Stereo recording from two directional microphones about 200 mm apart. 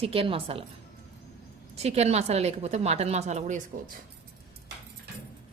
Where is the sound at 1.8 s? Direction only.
30° right (ahead or behind).